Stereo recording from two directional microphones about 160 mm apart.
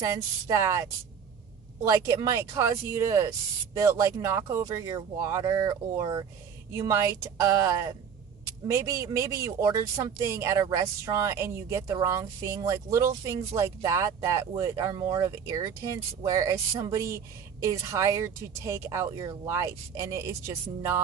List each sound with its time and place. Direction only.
0.0 s speech: 20° right (ahead or behind)
1.9 s speech: 20° right (ahead or behind)